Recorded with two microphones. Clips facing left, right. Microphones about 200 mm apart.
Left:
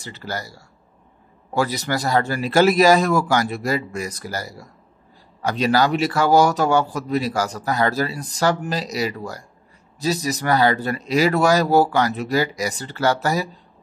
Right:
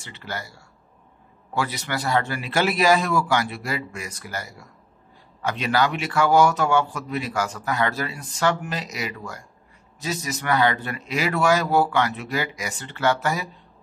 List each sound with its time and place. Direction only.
0.0 s speech: 40° left (ahead or behind)